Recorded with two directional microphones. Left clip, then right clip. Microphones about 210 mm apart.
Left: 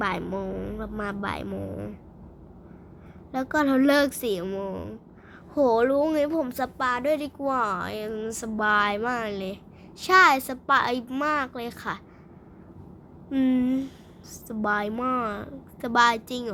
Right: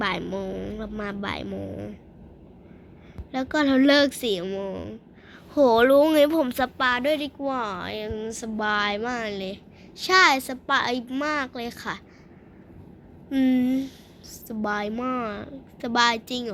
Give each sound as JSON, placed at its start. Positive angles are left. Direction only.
{"t": 0.0, "sound": "speech", "side_deg": 5}
{"t": 3.3, "sound": "speech", "side_deg": 5}
{"t": 5.5, "sound": "speech", "side_deg": -15}
{"t": 6.8, "sound": "speech", "side_deg": -5}
{"t": 7.1, "sound": "a woman's voice", "side_deg": 15}
{"t": 13.3, "sound": "a woman's voice", "side_deg": 10}